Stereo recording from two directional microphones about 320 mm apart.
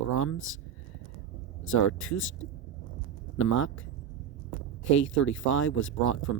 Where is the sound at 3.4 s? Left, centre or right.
Left.